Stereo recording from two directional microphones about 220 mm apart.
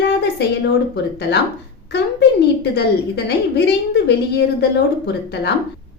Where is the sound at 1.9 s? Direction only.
50° left (ahead or behind).